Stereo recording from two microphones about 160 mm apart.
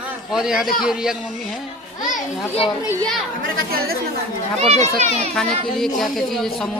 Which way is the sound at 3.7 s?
70° right (ahead or behind).